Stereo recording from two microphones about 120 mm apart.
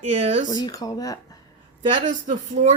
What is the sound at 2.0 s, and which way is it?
Speech, 90° right.